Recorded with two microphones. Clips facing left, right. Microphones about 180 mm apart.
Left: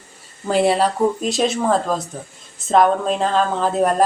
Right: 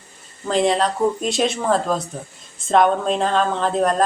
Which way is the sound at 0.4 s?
5° left (ahead or behind).